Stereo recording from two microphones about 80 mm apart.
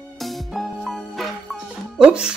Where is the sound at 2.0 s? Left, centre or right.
Centre.